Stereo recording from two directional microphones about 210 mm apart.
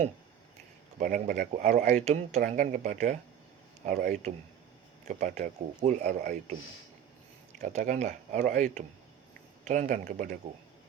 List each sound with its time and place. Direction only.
0.9 s speech: 40° right (ahead or behind)
7.6 s speech: 35° right (ahead or behind)